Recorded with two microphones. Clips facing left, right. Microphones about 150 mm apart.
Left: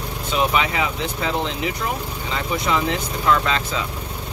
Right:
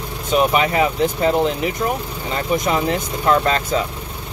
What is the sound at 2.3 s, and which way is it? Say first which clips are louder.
Speech: right 3 dB; 45° right (ahead or behind).